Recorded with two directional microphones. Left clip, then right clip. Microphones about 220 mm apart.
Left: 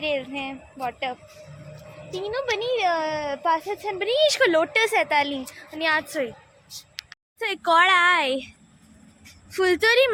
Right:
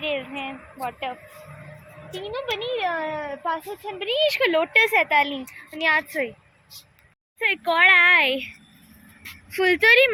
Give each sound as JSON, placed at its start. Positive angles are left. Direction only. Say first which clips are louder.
{"t": 0.0, "sound": "a woman's voice", "louder": "left 1 dB", "side_deg": 10}
{"t": 2.1, "sound": "a child's voice", "louder": "left 2 dB", "side_deg": 20}
{"t": 6.0, "sound": "a woman's voice", "louder": "right 1 dB", "side_deg": 0}
{"t": 7.3, "sound": "a woman's voice", "louder": "left 1 dB", "side_deg": 10}